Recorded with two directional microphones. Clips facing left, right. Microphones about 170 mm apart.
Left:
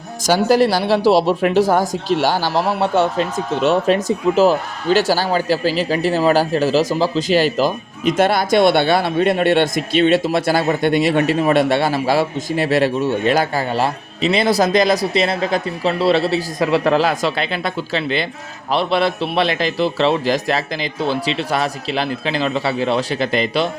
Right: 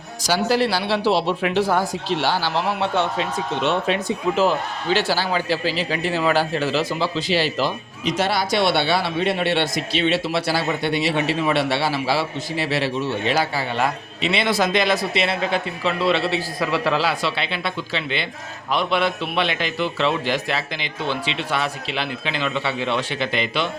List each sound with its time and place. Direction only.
0.2 s a man's voice: 45° left (ahead or behind)